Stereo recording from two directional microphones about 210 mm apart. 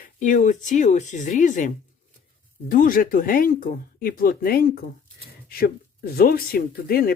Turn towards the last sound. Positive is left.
turn(degrees=45)  # may be behind; listen again after turning